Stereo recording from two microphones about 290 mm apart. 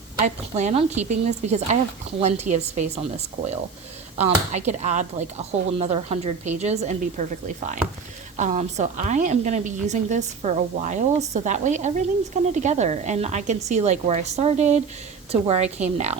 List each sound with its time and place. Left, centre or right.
0.2 s speech: right